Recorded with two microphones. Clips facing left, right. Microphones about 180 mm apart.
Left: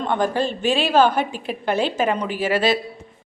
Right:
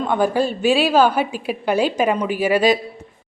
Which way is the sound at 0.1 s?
10° right (ahead or behind).